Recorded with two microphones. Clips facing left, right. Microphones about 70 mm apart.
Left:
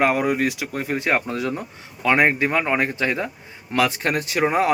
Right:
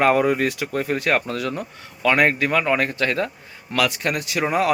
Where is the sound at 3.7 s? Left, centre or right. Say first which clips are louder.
Left 1 dB; left.